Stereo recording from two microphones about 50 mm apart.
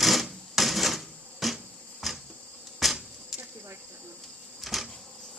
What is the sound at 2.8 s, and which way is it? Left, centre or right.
Insect, centre.